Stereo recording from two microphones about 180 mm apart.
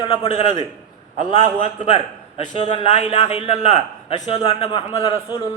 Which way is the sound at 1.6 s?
40° left (ahead or behind).